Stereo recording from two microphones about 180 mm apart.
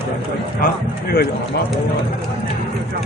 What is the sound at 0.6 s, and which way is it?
Speech, 55° left (ahead or behind).